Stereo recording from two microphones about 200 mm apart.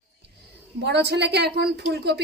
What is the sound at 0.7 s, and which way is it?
A woman's voice, 55° right (ahead or behind).